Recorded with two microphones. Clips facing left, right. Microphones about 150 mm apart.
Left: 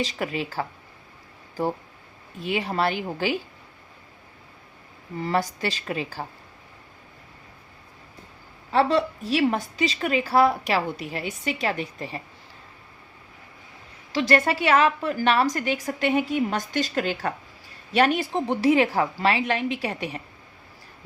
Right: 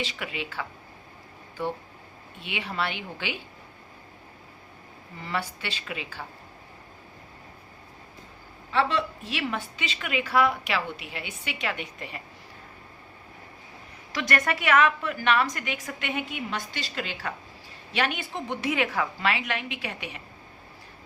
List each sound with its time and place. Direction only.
0.0 s a woman's voice: 40° left (ahead or behind)
2.4 s a woman's voice: 40° left (ahead or behind)
5.2 s a woman's voice: 40° left (ahead or behind)
8.7 s a woman's voice: 40° left (ahead or behind)
14.1 s a woman's voice: 30° left (ahead or behind)